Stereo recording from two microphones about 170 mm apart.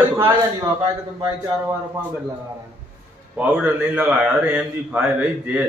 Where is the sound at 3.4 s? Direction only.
5° right (ahead or behind).